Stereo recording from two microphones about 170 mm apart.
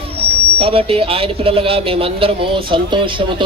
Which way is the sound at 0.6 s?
35° right (ahead or behind).